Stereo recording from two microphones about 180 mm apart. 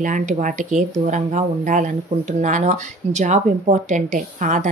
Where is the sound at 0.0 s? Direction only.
45° right (ahead or behind).